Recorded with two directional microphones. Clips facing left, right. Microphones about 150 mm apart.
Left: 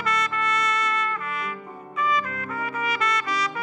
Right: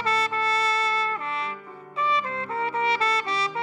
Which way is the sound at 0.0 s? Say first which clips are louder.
Right 1 dB; 30° right (ahead or behind).